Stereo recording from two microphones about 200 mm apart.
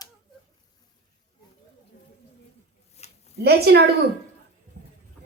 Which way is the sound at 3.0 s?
35° left (ahead or behind).